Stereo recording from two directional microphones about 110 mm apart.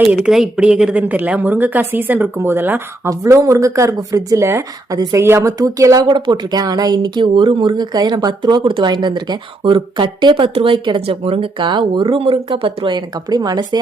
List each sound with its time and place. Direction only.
0.3 s a woman's voice: 5° right (ahead or behind)
3.1 s speech: 30° right (ahead or behind)